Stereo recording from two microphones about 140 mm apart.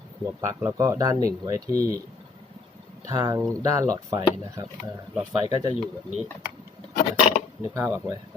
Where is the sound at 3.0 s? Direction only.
25° right (ahead or behind).